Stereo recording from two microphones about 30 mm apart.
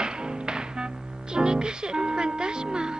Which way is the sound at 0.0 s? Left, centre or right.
Right.